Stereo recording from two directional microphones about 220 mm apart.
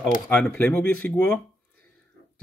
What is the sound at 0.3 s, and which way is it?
Speech, 5° left (ahead or behind).